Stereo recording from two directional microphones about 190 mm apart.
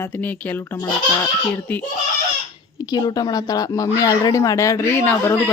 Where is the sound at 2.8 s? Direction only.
20° left (ahead or behind).